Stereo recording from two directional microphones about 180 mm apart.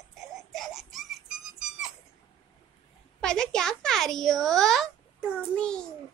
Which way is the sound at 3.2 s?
5° left (ahead or behind).